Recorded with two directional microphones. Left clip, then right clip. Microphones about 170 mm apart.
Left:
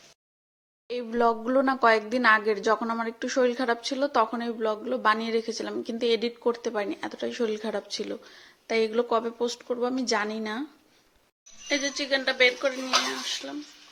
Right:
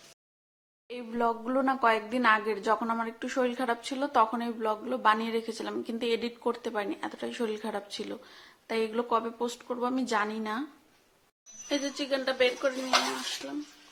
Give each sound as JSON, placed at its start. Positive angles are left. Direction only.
{"t": 0.9, "sound": "speech", "side_deg": 25}
{"t": 11.7, "sound": "a woman's voice", "side_deg": -5}